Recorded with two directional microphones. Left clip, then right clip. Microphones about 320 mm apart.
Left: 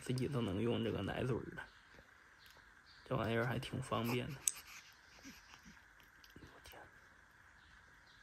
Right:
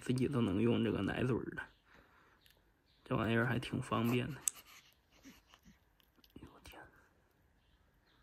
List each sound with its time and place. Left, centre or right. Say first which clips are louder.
0.1 s speech: right 5 dB; right
3.1 s speech: right 3 dB; right
4.5 s a sound: left 1 dB; centre